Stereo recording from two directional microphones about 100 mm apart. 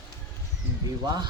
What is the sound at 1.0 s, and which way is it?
Speech, 45° right (ahead or behind).